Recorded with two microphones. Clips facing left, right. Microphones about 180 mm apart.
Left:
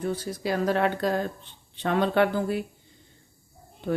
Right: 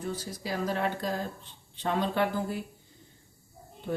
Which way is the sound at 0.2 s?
65° left (ahead or behind).